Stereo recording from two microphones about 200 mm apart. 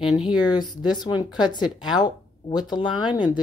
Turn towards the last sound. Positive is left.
turn(degrees=20)  # may be behind; listen again after turning